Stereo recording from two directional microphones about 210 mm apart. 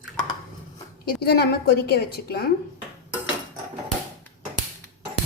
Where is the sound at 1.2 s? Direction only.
50° left (ahead or behind).